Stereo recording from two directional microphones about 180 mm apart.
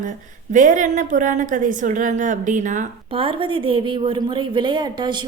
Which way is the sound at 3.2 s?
30° right (ahead or behind).